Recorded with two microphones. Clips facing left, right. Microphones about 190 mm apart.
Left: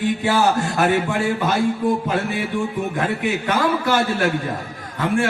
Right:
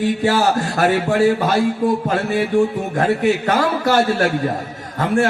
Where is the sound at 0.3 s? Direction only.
45° right (ahead or behind).